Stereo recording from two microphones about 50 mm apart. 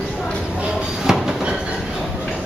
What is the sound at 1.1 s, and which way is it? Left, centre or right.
Train, centre.